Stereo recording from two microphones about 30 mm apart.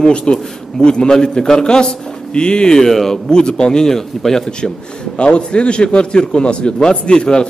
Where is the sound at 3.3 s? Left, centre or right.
Left.